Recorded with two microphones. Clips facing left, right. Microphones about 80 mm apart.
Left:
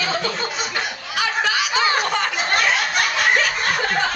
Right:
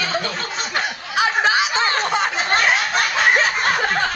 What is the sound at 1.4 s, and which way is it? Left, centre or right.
Snicker, right.